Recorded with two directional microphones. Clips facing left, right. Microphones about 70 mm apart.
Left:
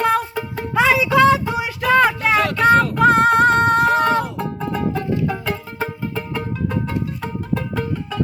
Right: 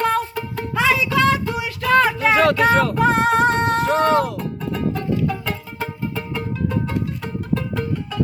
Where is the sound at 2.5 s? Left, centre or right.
Centre.